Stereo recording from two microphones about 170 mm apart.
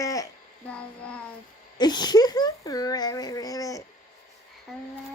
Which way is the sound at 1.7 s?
25° left (ahead or behind).